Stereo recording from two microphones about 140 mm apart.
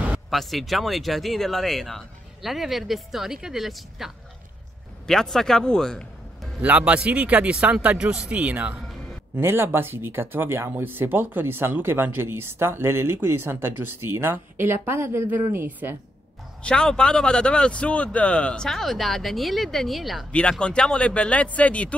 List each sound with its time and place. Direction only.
0.1 s speech: centre (ahead or behind)
6.6 s speech: 10° right (ahead or behind)
16.6 s speech: 5° left (ahead or behind)